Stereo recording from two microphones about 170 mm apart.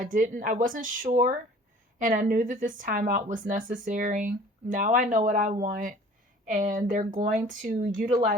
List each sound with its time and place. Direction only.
0.0 s speech: 50° right (ahead or behind)